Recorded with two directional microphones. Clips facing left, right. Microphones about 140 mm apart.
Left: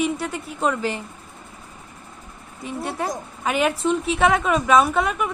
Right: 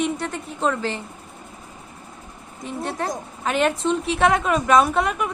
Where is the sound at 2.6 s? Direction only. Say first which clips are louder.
Even; 5° left (ahead or behind).